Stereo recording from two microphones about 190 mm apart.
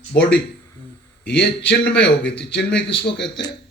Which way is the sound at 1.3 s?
65° left (ahead or behind).